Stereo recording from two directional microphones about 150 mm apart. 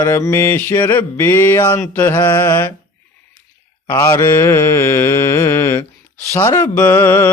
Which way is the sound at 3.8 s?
25° left (ahead or behind).